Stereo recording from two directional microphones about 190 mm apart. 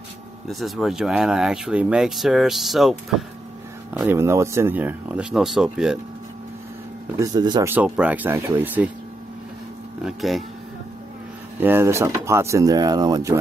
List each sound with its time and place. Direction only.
0.5 s speech: centre (ahead or behind)
7.2 s speech: 20° right (ahead or behind)
7.7 s speech: 5° right (ahead or behind)
10.0 s speech: centre (ahead or behind)
11.6 s speech: 15° right (ahead or behind)